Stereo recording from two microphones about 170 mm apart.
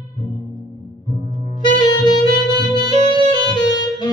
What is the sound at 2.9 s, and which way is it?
Saxophone, 25° left (ahead or behind).